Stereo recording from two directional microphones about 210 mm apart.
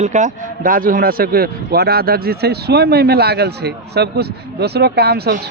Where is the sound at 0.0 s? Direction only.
35° right (ahead or behind).